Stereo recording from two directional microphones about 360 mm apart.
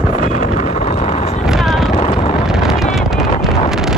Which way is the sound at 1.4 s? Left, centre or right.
Centre.